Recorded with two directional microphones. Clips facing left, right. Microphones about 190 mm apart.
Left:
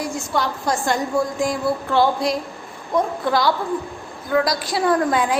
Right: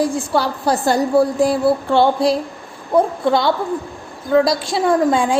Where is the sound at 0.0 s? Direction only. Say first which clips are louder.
Right 6 dB; 30° right (ahead or behind).